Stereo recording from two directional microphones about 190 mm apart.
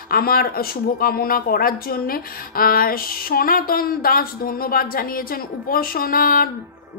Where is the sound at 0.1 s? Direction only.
50° left (ahead or behind).